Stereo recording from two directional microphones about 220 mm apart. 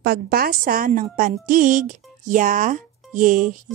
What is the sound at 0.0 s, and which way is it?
A woman's voice, 45° right (ahead or behind).